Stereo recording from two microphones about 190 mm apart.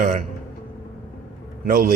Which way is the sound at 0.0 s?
45° right (ahead or behind).